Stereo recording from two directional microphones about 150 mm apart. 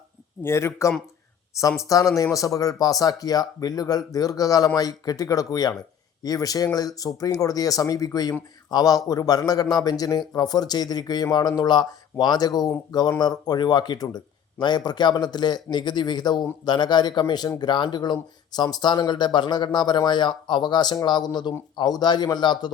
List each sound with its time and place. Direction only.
0.4 s speech: 20° left (ahead or behind)